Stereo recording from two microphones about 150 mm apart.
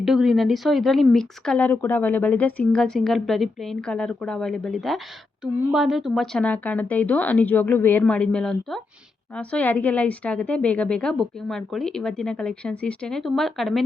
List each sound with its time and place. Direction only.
0.0 s a woman's voice: centre (ahead or behind)